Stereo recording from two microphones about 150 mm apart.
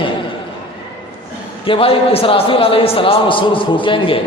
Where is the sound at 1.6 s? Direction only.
35° left (ahead or behind).